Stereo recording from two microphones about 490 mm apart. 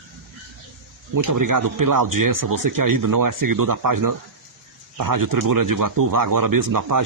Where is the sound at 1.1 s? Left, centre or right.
Right.